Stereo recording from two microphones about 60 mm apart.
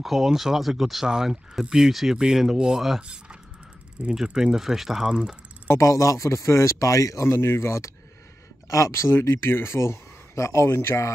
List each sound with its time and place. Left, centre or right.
0.0 s speech: centre
5.7 s speech: left
7.2 s speech: left